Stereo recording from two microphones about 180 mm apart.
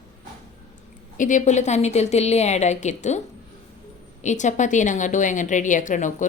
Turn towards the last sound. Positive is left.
turn(degrees=45)  # may be behind; listen again after turning